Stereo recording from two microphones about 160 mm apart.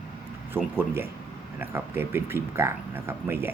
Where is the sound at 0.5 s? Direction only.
15° right (ahead or behind).